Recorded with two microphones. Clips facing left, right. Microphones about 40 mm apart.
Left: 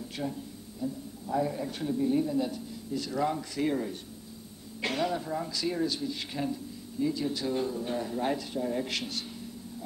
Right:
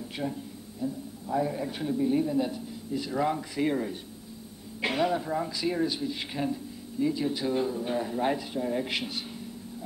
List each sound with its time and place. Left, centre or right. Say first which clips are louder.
0.2 s a man's voice: right 2 dB; centre